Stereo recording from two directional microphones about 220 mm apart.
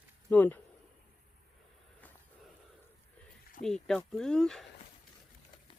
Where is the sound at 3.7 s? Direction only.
Centre (ahead or behind).